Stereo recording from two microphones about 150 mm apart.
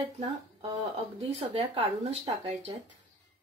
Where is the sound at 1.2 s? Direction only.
40° right (ahead or behind).